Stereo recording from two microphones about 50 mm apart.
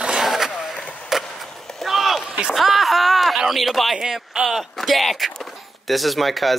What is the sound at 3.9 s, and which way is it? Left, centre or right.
Speech, centre.